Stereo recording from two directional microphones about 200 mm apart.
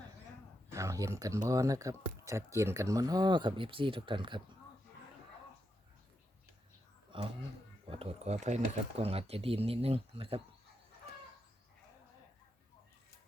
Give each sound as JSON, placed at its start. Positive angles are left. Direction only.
{"t": 0.7, "sound": "speech", "side_deg": -15}
{"t": 7.1, "sound": "a sound", "side_deg": -25}
{"t": 7.9, "sound": "speech", "side_deg": -30}